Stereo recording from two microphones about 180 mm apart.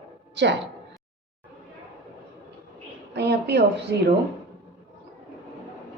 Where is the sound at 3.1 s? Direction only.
65° right (ahead or behind).